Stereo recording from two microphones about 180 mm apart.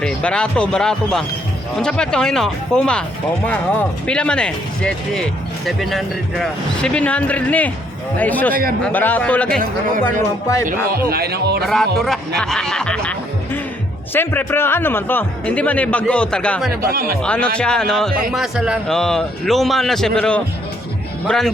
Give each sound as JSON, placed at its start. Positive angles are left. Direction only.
{"t": 0.0, "sound": "speech", "side_deg": 5}
{"t": 10.9, "sound": "speech", "side_deg": -60}
{"t": 11.6, "sound": "speech", "side_deg": 0}
{"t": 16.9, "sound": "speech", "side_deg": -55}
{"t": 17.2, "sound": "speech", "side_deg": 5}